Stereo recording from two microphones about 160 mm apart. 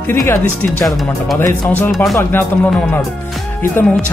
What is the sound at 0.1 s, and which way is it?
Speech, 15° left (ahead or behind).